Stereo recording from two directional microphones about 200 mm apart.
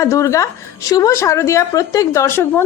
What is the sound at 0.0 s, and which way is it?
A woman's voice, 15° left (ahead or behind).